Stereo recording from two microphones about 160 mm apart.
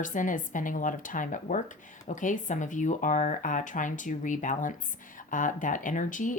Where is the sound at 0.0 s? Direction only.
55° left (ahead or behind).